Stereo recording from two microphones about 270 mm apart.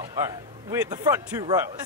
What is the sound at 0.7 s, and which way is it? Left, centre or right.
Speech, centre.